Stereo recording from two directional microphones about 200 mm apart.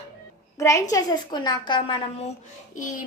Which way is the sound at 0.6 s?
15° left (ahead or behind).